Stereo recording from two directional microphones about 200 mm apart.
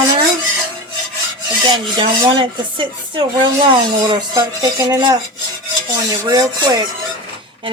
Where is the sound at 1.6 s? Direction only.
25° right (ahead or behind).